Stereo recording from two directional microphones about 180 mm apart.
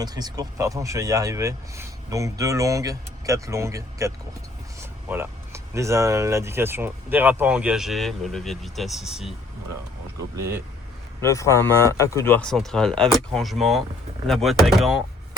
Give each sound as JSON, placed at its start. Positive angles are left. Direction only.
{"t": 0.0, "sound": "speech", "side_deg": -20}
{"t": 10.3, "sound": "speech", "side_deg": -15}
{"t": 11.2, "sound": "speech", "side_deg": 15}